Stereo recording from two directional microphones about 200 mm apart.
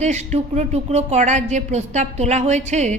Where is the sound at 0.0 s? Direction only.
35° right (ahead or behind).